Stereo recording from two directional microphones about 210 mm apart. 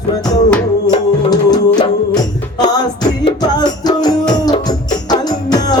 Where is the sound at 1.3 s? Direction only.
20° left (ahead or behind).